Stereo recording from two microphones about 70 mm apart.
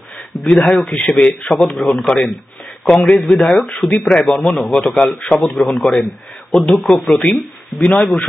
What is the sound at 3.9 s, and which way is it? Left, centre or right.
Speech, centre.